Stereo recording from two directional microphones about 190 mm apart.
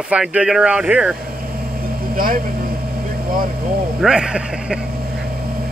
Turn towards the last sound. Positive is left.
turn(degrees=-50)  # may be behind; listen again after turning